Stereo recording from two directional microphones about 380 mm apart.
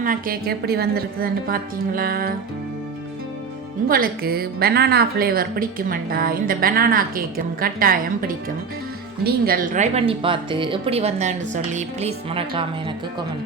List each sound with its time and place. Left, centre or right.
0.0 s a woman's voice: right
3.8 s a woman's voice: right